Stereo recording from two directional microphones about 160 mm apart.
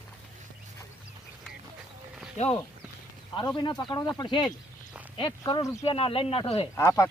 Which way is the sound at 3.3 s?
25° left (ahead or behind).